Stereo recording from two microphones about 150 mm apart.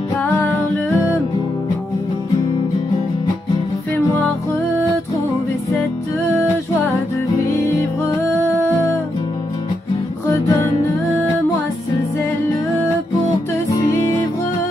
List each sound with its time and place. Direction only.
0.2 s music: centre (ahead or behind)
8.5 s music: 20° left (ahead or behind)
10.3 s music: 20° left (ahead or behind)